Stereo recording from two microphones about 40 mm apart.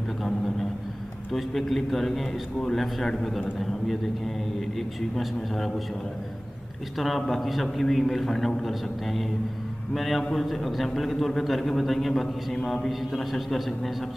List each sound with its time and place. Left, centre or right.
1.3 s a man's voice: centre
7.0 s a man's voice: centre